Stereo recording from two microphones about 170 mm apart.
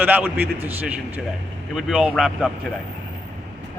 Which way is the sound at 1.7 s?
5° right (ahead or behind).